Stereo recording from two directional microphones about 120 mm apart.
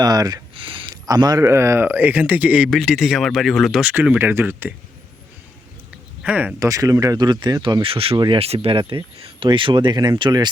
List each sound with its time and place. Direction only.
0.0 s speech: 30° right (ahead or behind)
0.5 s a sound: 45° right (ahead or behind)
1.0 s speech: 30° right (ahead or behind); by 2.6 s 10° right (ahead or behind)
2.6 s speech: centre (ahead or behind)
3.8 s speech: 10° right (ahead or behind)
6.2 s speech: 10° right (ahead or behind)
6.6 s speech: 30° right (ahead or behind); by 8.1 s 50° right (ahead or behind)
8.1 s speech: 40° right (ahead or behind)
8.4 s speech: 55° right (ahead or behind)